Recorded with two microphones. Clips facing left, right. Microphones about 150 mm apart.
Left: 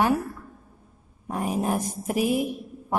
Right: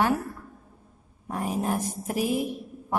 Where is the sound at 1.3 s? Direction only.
15° left (ahead or behind).